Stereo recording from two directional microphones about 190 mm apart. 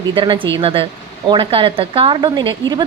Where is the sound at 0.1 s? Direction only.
25° right (ahead or behind).